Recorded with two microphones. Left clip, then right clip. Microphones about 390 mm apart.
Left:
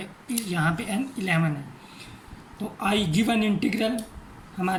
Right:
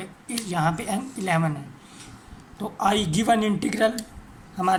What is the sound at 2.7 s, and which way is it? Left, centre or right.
Speech, centre.